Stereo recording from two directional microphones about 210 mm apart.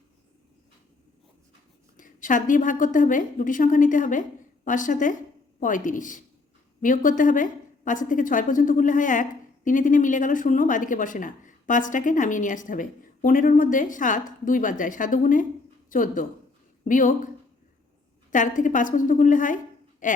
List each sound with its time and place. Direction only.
2.0 s a woman's voice: 40° left (ahead or behind)
18.3 s a woman's voice: 40° left (ahead or behind)